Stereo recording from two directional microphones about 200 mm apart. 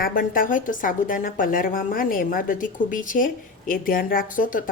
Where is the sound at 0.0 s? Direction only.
45° left (ahead or behind).